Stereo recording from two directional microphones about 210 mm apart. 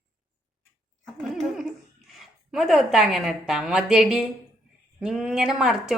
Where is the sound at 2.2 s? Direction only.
Centre (ahead or behind).